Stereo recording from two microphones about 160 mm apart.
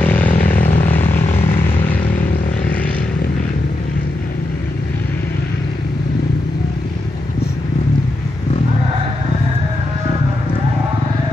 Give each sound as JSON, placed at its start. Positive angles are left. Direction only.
{"t": 0.0, "sound": "vehicle", "side_deg": 10}
{"t": 0.3, "sound": "vehicle", "side_deg": 55}